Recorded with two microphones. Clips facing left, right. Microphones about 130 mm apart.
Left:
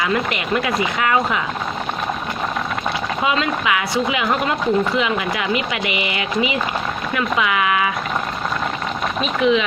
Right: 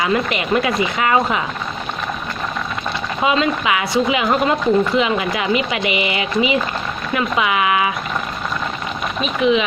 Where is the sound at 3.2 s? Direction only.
25° right (ahead or behind).